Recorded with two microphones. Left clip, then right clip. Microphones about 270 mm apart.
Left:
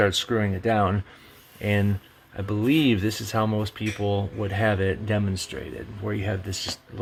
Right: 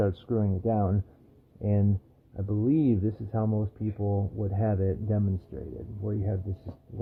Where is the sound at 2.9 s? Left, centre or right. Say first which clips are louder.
Left 5 dB; left.